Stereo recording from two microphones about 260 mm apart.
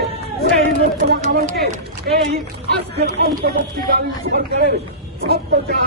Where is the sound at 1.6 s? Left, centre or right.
Right.